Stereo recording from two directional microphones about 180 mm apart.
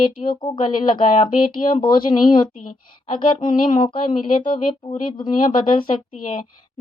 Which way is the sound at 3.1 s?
25° left (ahead or behind).